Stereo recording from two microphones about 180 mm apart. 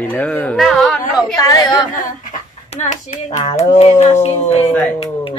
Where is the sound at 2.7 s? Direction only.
40° left (ahead or behind).